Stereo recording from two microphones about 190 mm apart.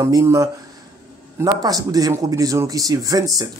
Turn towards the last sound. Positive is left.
turn(degrees=-20)  # may be behind; listen again after turning